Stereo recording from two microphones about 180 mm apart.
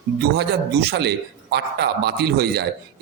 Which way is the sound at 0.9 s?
65° right (ahead or behind).